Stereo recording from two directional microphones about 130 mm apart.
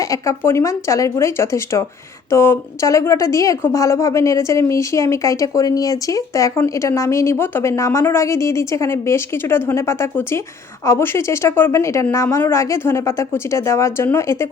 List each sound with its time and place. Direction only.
0.0 s a woman's voice: 25° left (ahead or behind)